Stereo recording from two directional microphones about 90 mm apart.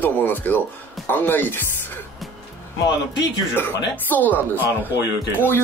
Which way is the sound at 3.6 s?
20° left (ahead or behind).